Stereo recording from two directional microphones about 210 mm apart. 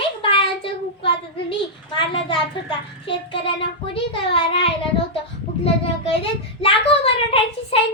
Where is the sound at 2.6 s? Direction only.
25° left (ahead or behind).